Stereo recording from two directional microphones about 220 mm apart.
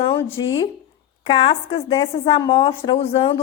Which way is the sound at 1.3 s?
25° left (ahead or behind).